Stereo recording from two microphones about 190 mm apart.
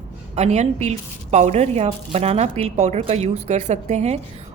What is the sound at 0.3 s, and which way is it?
A woman's voice, 35° right (ahead or behind).